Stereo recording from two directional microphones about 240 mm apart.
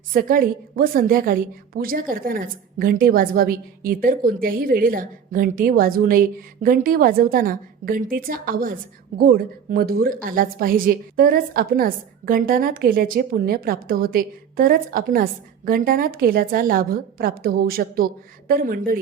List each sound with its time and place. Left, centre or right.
0.1 s a woman's voice: right